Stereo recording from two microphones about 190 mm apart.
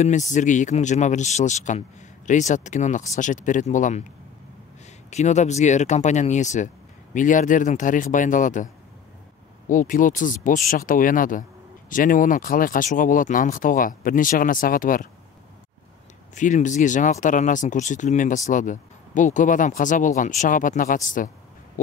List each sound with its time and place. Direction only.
0.0 s speech: 40° left (ahead or behind)
5.1 s speech: 40° left (ahead or behind)
9.7 s speech: 45° left (ahead or behind)
16.3 s speech: 40° left (ahead or behind)